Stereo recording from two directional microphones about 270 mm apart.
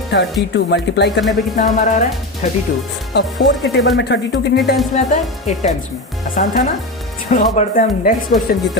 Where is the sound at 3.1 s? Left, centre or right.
Left.